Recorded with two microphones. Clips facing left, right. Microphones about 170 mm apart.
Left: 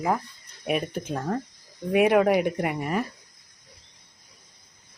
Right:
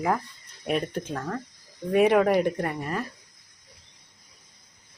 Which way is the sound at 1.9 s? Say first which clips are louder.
Even; 5° left (ahead or behind).